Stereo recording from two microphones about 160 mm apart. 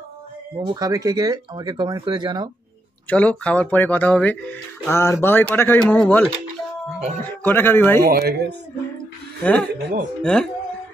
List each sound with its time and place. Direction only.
0.6 s speech: 25° right (ahead or behind)
3.1 s speech: 10° left (ahead or behind)
7.4 s speech: 15° left (ahead or behind)
8.0 s speech: 75° right (ahead or behind)
9.4 s speech: 10° left (ahead or behind)
9.8 s speech: 80° right
10.2 s speech: 5° left (ahead or behind)